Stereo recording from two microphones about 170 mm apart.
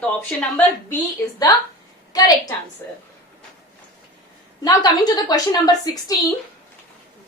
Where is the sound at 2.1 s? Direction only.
20° left (ahead or behind).